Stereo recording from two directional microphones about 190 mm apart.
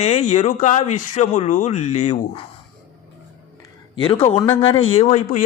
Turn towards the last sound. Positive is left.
turn(degrees=40)  # may be behind; listen again after turning